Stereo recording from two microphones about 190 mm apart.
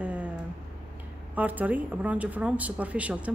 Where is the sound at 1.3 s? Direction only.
10° right (ahead or behind).